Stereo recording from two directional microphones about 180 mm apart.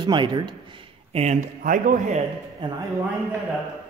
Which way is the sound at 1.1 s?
40° right (ahead or behind).